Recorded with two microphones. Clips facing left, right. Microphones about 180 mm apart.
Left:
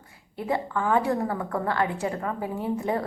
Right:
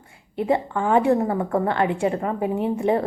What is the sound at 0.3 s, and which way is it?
A woman's voice, 25° right (ahead or behind).